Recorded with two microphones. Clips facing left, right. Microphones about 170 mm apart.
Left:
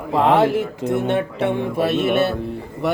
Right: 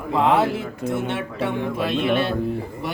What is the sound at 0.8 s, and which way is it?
Speech, 25° left (ahead or behind).